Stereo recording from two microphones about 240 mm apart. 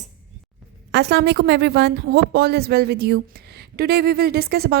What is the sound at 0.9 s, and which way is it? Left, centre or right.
A woman's voice, right.